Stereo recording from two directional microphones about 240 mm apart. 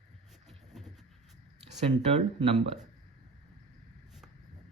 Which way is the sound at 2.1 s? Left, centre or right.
Right.